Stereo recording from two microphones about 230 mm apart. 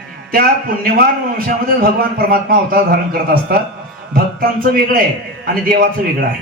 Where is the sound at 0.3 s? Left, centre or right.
Right.